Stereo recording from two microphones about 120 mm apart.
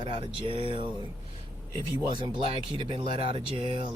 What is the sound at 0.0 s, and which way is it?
Speech, 45° right (ahead or behind).